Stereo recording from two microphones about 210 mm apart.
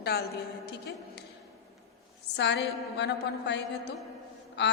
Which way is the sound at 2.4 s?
55° left (ahead or behind).